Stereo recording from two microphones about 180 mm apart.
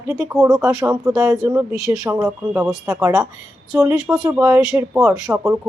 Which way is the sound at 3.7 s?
5° right (ahead or behind).